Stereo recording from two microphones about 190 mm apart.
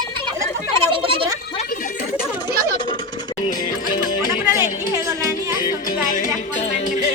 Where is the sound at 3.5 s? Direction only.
45° left (ahead or behind).